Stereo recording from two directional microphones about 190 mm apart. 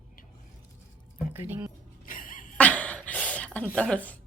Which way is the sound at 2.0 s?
45° left (ahead or behind).